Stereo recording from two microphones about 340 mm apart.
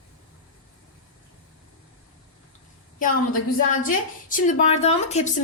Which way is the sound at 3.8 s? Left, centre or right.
Left.